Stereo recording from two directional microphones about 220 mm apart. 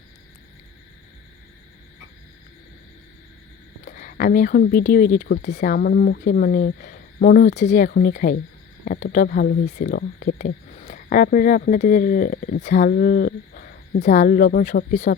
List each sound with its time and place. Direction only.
3.8 s speech: 40° left (ahead or behind)